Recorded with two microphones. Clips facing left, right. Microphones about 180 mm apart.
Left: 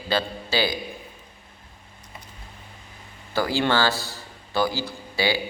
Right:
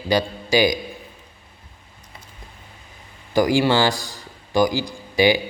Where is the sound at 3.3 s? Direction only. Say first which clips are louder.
Right 5 dB; 15° right (ahead or behind).